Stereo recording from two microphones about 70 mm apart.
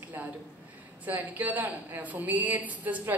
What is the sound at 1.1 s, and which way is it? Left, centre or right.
A woman's voice, right.